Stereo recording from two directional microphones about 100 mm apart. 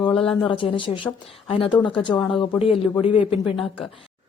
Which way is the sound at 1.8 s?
50° left (ahead or behind).